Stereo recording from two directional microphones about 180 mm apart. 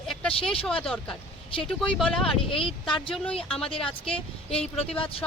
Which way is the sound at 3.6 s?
30° left (ahead or behind).